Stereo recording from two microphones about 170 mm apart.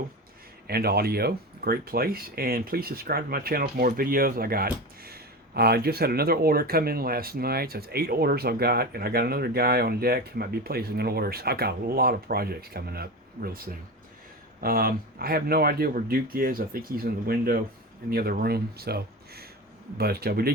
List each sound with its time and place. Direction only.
0.7 s speech: 65° right (ahead or behind)